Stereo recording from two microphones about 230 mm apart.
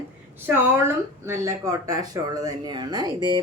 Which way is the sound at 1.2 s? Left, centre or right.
Centre.